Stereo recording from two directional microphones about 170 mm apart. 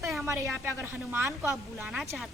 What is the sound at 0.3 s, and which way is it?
A woman's voice, 15° right (ahead or behind).